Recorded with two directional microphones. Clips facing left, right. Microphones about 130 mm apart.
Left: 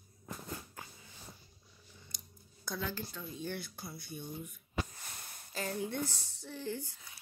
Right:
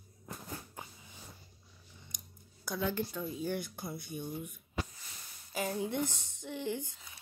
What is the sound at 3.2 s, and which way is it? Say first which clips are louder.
Speech: right 5 dB; 15° right (ahead or behind).